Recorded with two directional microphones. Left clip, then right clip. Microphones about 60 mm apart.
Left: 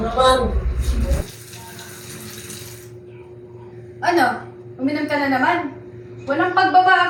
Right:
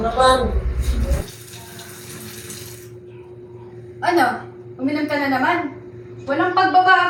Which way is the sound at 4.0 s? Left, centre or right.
Centre.